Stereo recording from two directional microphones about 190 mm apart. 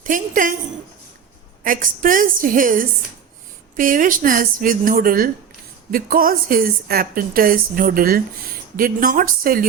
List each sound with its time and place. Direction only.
0.0 s a woman's voice: 45° right (ahead or behind)
1.6 s a woman's voice: 45° right (ahead or behind)